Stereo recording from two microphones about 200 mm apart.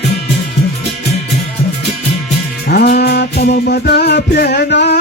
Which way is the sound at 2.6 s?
50° left (ahead or behind).